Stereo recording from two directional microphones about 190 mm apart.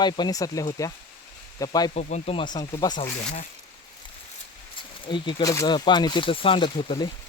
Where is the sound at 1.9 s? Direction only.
40° left (ahead or behind).